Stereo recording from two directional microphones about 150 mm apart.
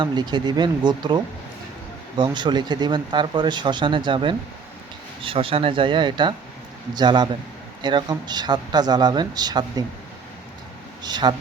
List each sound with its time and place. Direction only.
0.0 s speech: 30° right (ahead or behind)
11.0 s speech: 30° right (ahead or behind)